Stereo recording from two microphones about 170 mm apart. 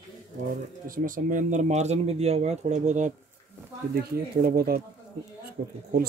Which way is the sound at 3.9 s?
65° right (ahead or behind).